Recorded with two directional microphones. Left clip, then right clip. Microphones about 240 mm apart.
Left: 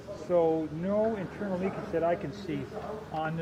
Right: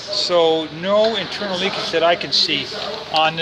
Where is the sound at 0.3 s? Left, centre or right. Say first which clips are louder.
Right 9 dB; centre.